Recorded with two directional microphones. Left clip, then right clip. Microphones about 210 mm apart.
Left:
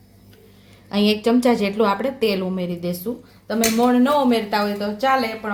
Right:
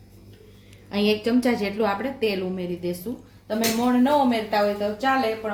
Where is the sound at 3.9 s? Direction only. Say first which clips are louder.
Left 3 dB; 35° left (ahead or behind).